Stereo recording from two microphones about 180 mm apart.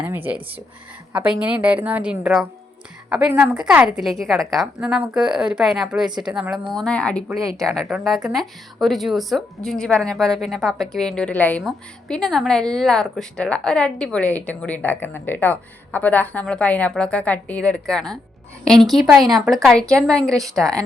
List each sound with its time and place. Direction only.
0.1 s a woman's voice: 10° right (ahead or behind); by 7.3 s 5° left (ahead or behind)
7.3 s a woman's voice: 20° right (ahead or behind)
7.6 s a woman's voice: centre (ahead or behind)